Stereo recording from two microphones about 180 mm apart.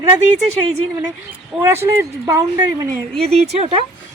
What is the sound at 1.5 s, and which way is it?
Speech, 10° right (ahead or behind).